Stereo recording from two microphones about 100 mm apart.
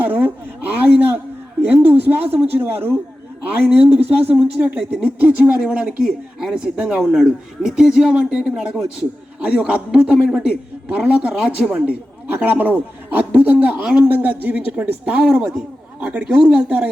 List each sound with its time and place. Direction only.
0.0 s a sound: 15° right (ahead or behind)
2.5 s a man's voice: 20° right (ahead or behind)
4.3 s speech: 15° right (ahead or behind)